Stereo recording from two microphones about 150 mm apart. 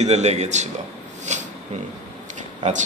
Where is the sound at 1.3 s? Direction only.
50° right (ahead or behind).